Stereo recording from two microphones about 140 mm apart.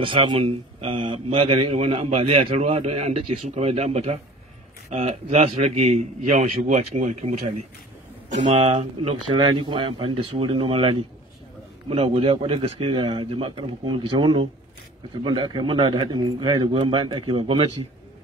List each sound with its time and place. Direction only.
0.0 s a man's voice: 35° right (ahead or behind); by 7.6 s 55° right (ahead or behind)
8.5 s speech: 40° right (ahead or behind)